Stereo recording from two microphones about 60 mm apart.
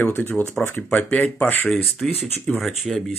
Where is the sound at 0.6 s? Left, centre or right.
Centre.